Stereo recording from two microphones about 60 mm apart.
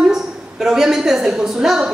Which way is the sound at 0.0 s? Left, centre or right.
Centre.